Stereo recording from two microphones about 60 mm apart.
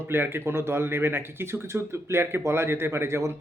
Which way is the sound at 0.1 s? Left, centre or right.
Right.